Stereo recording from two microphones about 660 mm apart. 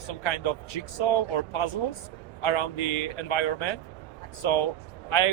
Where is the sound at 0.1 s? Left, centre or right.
Left.